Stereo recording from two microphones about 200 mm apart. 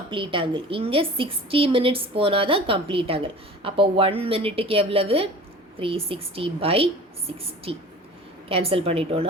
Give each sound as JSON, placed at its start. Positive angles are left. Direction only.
{"t": 0.1, "sound": "a woman's voice", "side_deg": -25}